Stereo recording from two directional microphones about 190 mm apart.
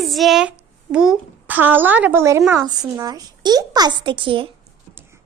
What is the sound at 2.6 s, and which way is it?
A woman's voice, 20° right (ahead or behind).